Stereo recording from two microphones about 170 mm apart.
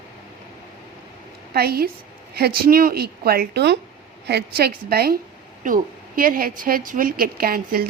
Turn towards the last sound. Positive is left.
turn(degrees=-60)  # may be behind; listen again after turning